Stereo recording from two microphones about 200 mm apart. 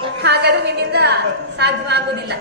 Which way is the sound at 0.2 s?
55° right (ahead or behind).